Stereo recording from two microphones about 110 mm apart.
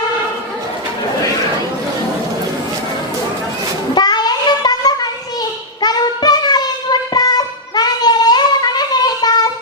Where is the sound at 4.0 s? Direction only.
40° left (ahead or behind).